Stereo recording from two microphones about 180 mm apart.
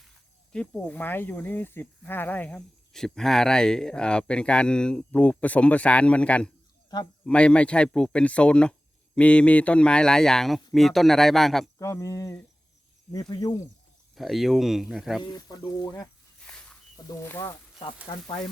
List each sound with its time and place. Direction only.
0.5 s speech: 5° left (ahead or behind)
6.9 s speech: 20° left (ahead or behind)
7.3 s speech: 5° left (ahead or behind)
11.8 s speech: 15° left (ahead or behind)
14.2 s speech: centre (ahead or behind)
15.2 s speech: 20° left (ahead or behind)
16.5 s a sound: 5° left (ahead or behind)
17.1 s speech: 15° left (ahead or behind)
18.1 s speech: 30° left (ahead or behind)